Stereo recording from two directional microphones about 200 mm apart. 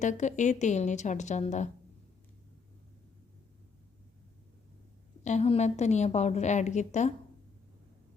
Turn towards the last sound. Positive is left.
turn(degrees=35)  # may be behind; listen again after turning